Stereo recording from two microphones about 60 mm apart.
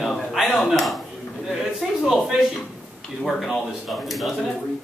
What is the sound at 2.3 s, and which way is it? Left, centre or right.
Speech, centre.